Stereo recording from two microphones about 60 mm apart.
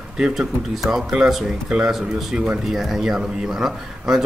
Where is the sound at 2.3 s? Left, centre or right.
Centre.